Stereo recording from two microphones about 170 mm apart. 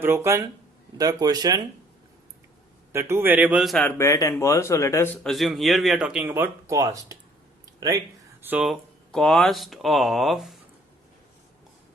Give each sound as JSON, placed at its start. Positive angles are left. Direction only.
{"t": 0.0, "sound": "speech", "side_deg": -15}
{"t": 2.9, "sound": "speech", "side_deg": -15}
{"t": 3.8, "sound": "speech", "side_deg": 15}